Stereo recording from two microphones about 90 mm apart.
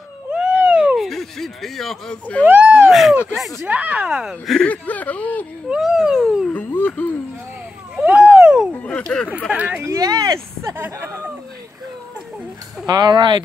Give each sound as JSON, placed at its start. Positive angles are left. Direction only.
{"t": 0.3, "sound": "cat", "side_deg": -15}
{"t": 0.9, "sound": "speech", "side_deg": 0}
{"t": 2.4, "sound": "speech", "side_deg": -20}
{"t": 2.9, "sound": "a child's voice", "side_deg": 0}
{"t": 3.6, "sound": "speech", "side_deg": -15}
{"t": 4.6, "sound": "speech", "side_deg": 15}
{"t": 5.7, "sound": "a child's voice", "side_deg": -5}
{"t": 6.5, "sound": "speech", "side_deg": 20}
{"t": 7.9, "sound": "a sound", "side_deg": -15}
{"t": 8.8, "sound": "speech", "side_deg": 10}
{"t": 9.5, "sound": "speech", "side_deg": -15}
{"t": 9.8, "sound": "speech", "side_deg": -40}
{"t": 10.6, "sound": "speech", "side_deg": -30}
{"t": 12.8, "sound": "speech", "side_deg": -50}